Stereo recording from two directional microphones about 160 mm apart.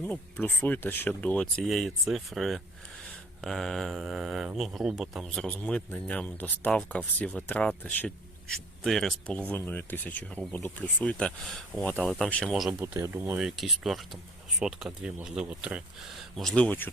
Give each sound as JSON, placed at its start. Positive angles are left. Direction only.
{"t": 0.0, "sound": "speech", "side_deg": 10}
{"t": 12.8, "sound": "speech", "side_deg": -15}
{"t": 13.4, "sound": "speech", "side_deg": 0}